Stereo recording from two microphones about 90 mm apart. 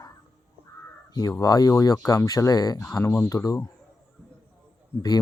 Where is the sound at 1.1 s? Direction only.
45° left (ahead or behind).